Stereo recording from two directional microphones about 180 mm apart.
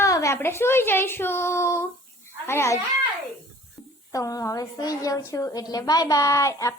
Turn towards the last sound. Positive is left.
turn(degrees=15)  # may be behind; listen again after turning